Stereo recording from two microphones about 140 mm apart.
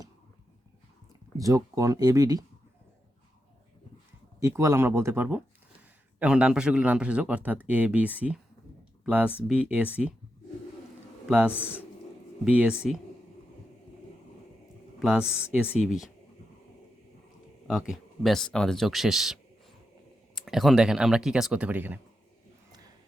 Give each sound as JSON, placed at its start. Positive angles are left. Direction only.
{"t": 1.4, "sound": "speech", "side_deg": -25}
{"t": 4.4, "sound": "speech", "side_deg": -20}
{"t": 11.3, "sound": "speech", "side_deg": -10}
{"t": 14.9, "sound": "speech", "side_deg": -5}
{"t": 17.7, "sound": "speech", "side_deg": 0}